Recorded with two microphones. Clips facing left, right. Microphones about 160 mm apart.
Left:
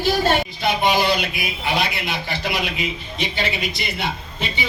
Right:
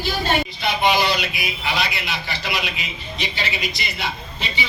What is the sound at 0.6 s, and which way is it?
A man's voice, 45° left (ahead or behind).